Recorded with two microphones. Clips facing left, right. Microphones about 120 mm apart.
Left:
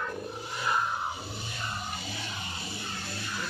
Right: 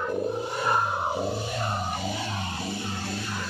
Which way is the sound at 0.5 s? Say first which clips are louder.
Right 1 dB; 45° right (ahead or behind).